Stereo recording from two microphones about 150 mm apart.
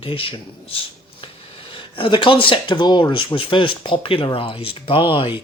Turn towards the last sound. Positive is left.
turn(degrees=35)  # may be behind; listen again after turning